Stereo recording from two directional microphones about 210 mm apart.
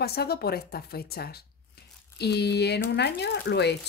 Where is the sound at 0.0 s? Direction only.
50° left (ahead or behind).